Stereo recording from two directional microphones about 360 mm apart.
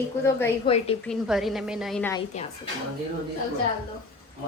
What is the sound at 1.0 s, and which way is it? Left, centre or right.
Music, centre.